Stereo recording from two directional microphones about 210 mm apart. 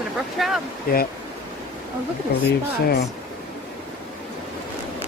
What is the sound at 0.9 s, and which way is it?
Speech, 45° left (ahead or behind).